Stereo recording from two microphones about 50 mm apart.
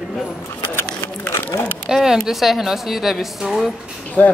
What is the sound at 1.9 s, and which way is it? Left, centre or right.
A woman's voice, centre.